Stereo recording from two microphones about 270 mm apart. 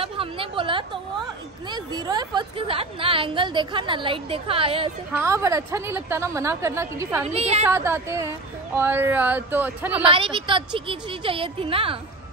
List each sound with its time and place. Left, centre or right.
0.0 s a sound: centre
1.7 s a woman's voice: centre
7.2 s a woman's voice: right
7.6 s a woman's voice: centre
10.1 s a woman's voice: centre